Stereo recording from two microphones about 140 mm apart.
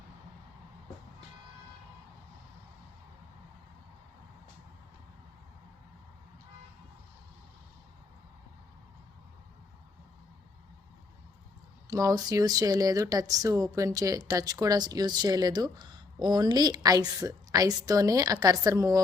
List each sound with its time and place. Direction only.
11.9 s speech: 25° right (ahead or behind)